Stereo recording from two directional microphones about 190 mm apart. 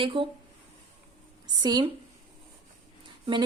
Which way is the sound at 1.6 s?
20° right (ahead or behind).